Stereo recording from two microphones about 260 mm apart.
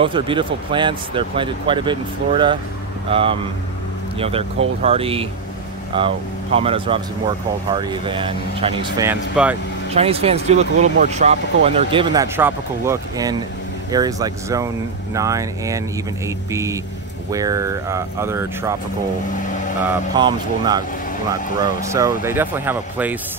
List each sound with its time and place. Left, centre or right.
0.0 s speech: centre
9.0 s speech: centre
9.9 s speech: right
20.2 s speech: centre